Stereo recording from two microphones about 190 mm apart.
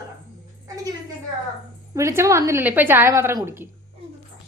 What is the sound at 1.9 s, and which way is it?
A woman's voice, 15° right (ahead or behind).